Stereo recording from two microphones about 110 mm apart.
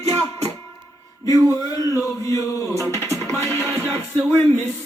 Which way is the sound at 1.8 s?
30° left (ahead or behind).